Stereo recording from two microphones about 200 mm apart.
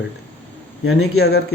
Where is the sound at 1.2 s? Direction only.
55° left (ahead or behind).